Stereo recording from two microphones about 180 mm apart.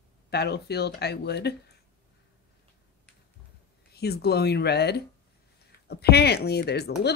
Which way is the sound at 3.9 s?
60° left (ahead or behind).